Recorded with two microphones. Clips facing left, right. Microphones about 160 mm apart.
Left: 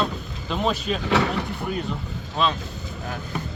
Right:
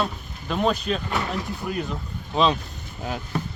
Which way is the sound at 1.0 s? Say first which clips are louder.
Left 5 dB; 80° left.